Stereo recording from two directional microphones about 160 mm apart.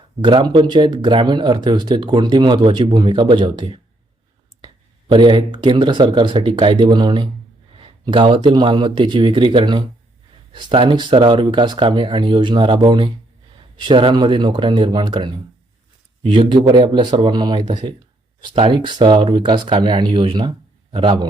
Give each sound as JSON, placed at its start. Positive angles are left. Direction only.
{"t": 0.2, "sound": "speech", "side_deg": -30}
{"t": 5.1, "sound": "speech", "side_deg": -30}